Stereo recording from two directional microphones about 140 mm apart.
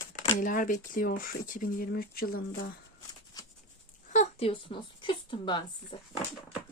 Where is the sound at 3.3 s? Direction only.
30° left (ahead or behind).